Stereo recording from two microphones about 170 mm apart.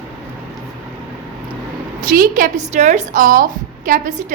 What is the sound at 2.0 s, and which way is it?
Speech, 60° right (ahead or behind).